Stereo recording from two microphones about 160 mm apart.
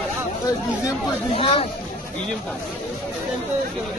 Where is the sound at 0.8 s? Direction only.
35° left (ahead or behind).